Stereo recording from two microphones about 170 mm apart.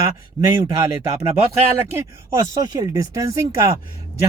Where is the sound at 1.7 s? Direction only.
15° right (ahead or behind).